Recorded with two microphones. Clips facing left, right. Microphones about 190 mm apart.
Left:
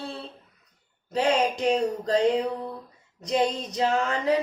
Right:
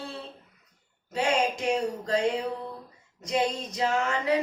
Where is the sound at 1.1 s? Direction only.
35° left (ahead or behind).